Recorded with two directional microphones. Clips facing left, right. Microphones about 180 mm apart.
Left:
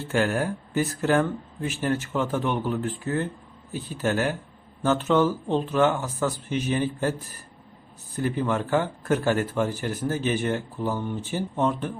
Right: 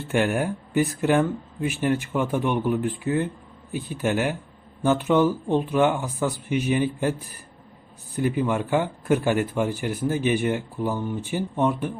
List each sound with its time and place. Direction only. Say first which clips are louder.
0.1 s speech: right 2 dB; 15° right (ahead or behind)